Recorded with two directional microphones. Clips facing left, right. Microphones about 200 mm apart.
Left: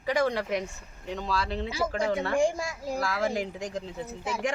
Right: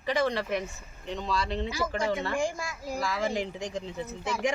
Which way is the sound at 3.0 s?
5° left (ahead or behind).